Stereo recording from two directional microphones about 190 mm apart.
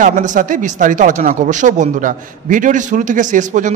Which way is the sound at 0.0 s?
40° right (ahead or behind).